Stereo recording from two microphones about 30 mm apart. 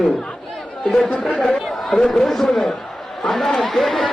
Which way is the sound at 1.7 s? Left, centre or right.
Centre.